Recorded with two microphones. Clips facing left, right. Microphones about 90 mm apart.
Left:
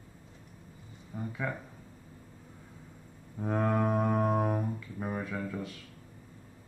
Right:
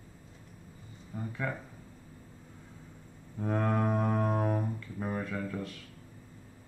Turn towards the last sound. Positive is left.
turn(degrees=5)  # may be behind; listen again after turning